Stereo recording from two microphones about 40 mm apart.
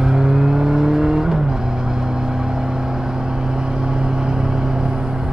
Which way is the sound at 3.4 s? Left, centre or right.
Centre.